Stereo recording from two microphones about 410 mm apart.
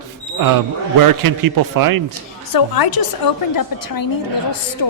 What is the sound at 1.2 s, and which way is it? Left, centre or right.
Speech, right.